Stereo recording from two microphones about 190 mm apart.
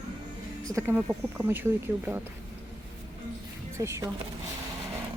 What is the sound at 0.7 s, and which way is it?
Speech, 15° right (ahead or behind).